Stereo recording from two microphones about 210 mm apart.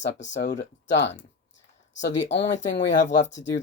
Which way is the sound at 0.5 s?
55° left (ahead or behind).